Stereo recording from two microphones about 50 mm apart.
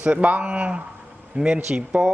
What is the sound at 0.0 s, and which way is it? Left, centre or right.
Speech, right.